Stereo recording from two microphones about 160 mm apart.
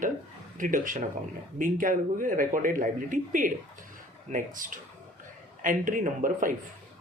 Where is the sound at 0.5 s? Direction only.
55° right (ahead or behind).